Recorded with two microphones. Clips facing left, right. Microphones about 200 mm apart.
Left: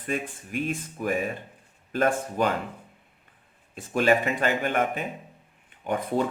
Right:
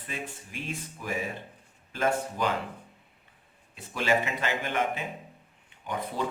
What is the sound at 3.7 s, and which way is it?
Speech, 50° left (ahead or behind).